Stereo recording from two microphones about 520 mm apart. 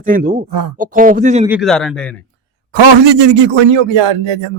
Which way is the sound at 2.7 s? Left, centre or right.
Right.